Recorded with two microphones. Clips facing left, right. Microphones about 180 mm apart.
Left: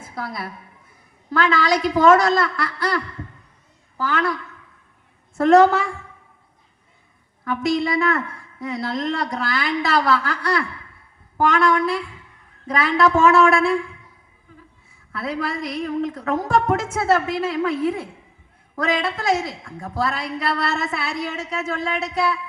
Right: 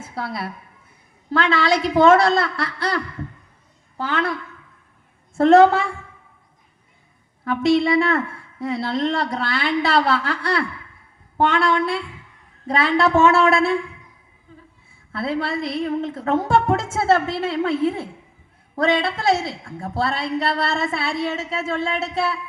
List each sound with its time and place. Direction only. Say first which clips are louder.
0.1 s a woman's voice: right 2 dB; 30° right (ahead or behind)
5.4 s a woman's voice: right 1 dB; 30° right (ahead or behind)
7.4 s a woman's voice: right 4 dB; 25° right (ahead or behind)
15.1 s a woman's voice: right 2 dB; 30° right (ahead or behind)